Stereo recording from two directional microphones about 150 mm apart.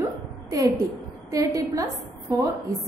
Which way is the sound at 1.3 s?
25° right (ahead or behind).